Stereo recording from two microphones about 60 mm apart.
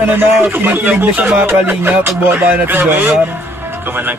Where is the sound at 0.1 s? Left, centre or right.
Right.